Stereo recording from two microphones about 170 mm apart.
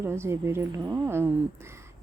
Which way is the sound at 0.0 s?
15° right (ahead or behind).